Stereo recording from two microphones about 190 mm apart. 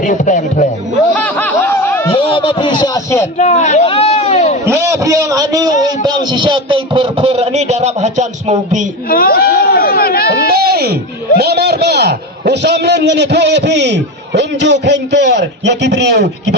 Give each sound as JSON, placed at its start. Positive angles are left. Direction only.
{"t": 0.0, "sound": "speech", "side_deg": 40}
{"t": 1.1, "sound": "snicker", "side_deg": 10}
{"t": 2.0, "sound": "speech", "side_deg": 30}
{"t": 3.3, "sound": "a man's voice", "side_deg": 35}
{"t": 4.7, "sound": "a man's voice", "side_deg": -15}
{"t": 9.0, "sound": "a sound", "side_deg": 50}
{"t": 10.5, "sound": "a man's voice", "side_deg": -55}